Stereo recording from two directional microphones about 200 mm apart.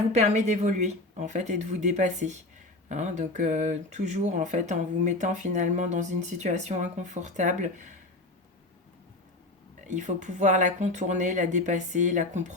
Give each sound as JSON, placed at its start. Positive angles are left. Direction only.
{"t": 0.1, "sound": "speech", "side_deg": -35}
{"t": 9.8, "sound": "speech", "side_deg": -35}